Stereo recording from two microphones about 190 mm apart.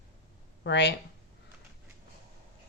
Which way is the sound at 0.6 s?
65° left (ahead or behind).